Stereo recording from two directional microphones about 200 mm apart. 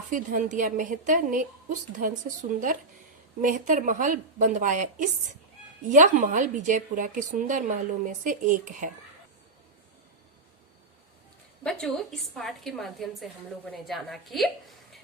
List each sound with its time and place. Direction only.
0.1 s a woman's voice: 40° right (ahead or behind)
3.4 s a woman's voice: 40° right (ahead or behind)
11.6 s a woman's voice: centre (ahead or behind)